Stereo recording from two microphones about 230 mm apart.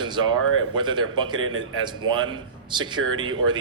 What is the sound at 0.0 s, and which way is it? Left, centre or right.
A man's voice, centre.